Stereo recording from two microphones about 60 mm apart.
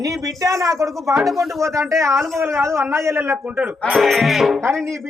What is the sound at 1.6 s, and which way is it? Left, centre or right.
A man's voice, right.